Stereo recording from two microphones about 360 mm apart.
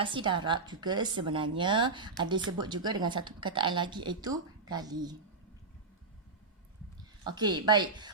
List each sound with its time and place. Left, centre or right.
0.0 s a woman's voice: centre
7.3 s a woman's voice: centre